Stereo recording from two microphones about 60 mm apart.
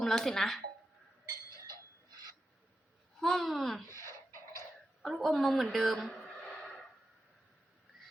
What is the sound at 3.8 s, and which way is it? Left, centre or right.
Beatboxing, left.